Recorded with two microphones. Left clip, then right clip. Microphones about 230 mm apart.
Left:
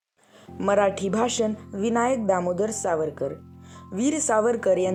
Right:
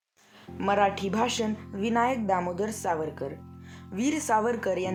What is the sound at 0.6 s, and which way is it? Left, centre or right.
A woman's voice, centre.